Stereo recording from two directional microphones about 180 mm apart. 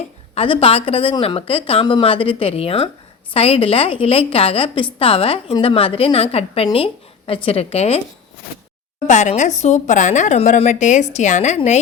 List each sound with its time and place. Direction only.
0.3 s a woman's voice: 30° left (ahead or behind)
9.0 s a woman's voice: 40° left (ahead or behind)